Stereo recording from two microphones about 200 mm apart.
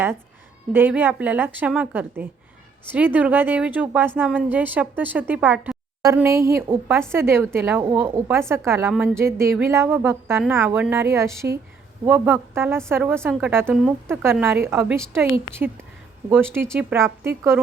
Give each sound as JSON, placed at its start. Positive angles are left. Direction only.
{"t": 0.7, "sound": "a woman's voice", "side_deg": -10}
{"t": 16.3, "sound": "a woman's voice", "side_deg": -10}